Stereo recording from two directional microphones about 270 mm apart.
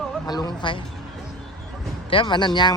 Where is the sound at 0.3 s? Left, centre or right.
Centre.